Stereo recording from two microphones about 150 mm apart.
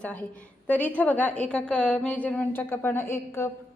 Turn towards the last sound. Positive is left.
turn(degrees=15)  # may be behind; listen again after turning